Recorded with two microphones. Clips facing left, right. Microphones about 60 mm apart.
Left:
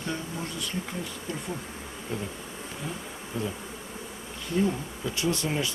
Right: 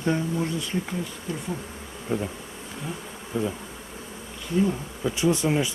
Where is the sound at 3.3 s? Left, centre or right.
Centre.